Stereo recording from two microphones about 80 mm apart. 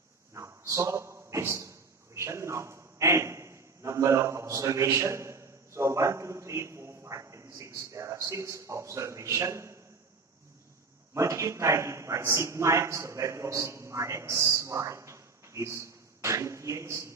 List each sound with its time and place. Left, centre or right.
0.3 s a sound: right
7.5 s a man's voice: right
11.1 s a man's voice: right